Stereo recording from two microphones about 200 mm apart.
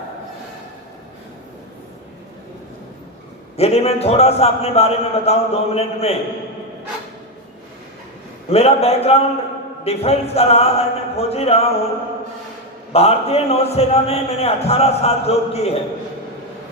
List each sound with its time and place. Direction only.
3.6 s a man's voice: 30° left (ahead or behind)
8.4 s a man's voice: 30° left (ahead or behind)
12.9 s a man's voice: 30° left (ahead or behind)